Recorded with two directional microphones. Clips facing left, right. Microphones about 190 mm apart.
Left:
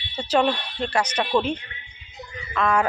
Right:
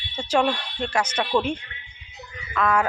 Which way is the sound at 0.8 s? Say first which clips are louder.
Left 1 dB; 10° right (ahead or behind).